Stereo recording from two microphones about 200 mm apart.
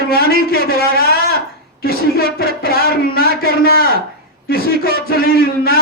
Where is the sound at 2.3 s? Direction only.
50° left (ahead or behind).